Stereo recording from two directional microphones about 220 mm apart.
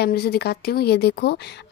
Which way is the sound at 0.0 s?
45° left (ahead or behind).